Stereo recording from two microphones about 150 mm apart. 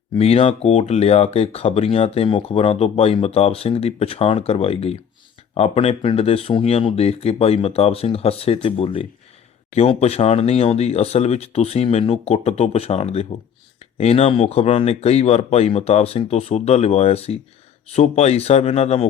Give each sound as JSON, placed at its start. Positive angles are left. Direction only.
{"t": 0.2, "sound": "speech", "side_deg": 40}